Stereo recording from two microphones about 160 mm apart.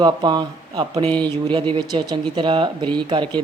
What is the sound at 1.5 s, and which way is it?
Speech, 30° right (ahead or behind).